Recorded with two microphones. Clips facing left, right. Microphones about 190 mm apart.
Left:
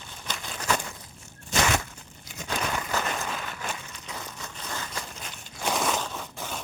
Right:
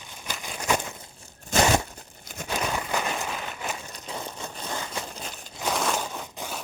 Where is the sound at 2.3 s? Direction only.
50° right (ahead or behind).